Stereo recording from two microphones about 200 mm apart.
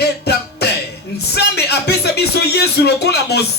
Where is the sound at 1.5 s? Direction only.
55° left (ahead or behind).